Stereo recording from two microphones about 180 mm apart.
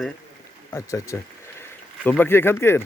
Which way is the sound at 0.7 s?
15° left (ahead or behind).